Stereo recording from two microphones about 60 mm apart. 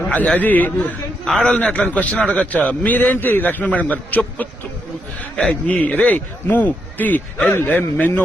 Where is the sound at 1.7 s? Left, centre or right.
Left.